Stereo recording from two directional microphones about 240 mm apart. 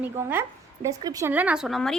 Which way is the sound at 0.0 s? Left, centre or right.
Centre.